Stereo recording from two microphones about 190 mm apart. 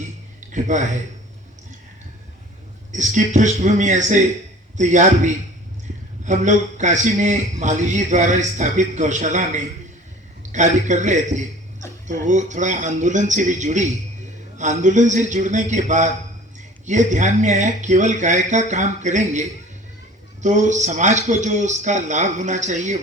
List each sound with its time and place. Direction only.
0.5 s a man's voice: 40° right (ahead or behind)
2.9 s a man's voice: 40° right (ahead or behind)